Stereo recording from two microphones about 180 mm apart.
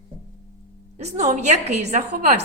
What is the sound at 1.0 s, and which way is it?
A woman's voice, 40° right (ahead or behind).